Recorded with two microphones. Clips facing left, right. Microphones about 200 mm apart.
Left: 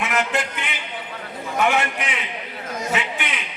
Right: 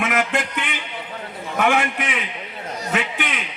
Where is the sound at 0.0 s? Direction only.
50° right (ahead or behind).